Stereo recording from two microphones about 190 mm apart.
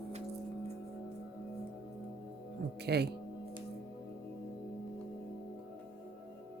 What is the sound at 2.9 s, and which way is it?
Speech, 60° right (ahead or behind).